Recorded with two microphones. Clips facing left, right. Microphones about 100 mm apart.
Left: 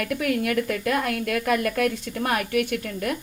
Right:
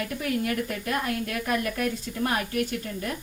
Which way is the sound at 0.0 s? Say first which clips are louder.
Left 4 dB; 90° left.